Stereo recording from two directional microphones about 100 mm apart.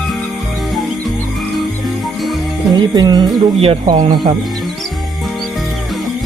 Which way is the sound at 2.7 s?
45° right (ahead or behind).